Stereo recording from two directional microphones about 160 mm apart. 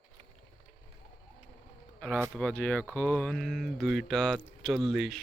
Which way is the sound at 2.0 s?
5° left (ahead or behind).